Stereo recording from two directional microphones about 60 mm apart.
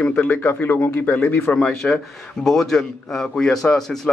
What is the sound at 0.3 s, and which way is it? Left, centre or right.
Speech, left.